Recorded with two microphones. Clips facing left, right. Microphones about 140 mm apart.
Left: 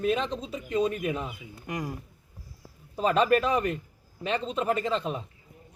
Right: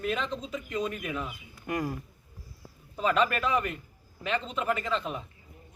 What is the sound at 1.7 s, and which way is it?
Speech, 15° left (ahead or behind).